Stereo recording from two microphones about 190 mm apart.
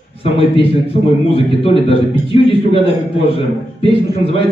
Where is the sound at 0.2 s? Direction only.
30° left (ahead or behind).